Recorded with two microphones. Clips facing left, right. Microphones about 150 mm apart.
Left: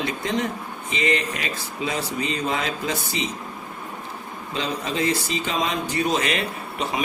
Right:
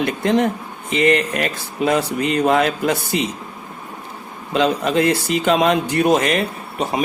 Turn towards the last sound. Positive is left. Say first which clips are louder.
# right 5 dB
turn(degrees=-45)  # may be behind; listen again after turning